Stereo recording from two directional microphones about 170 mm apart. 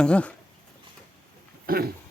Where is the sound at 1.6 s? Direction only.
60° right (ahead or behind).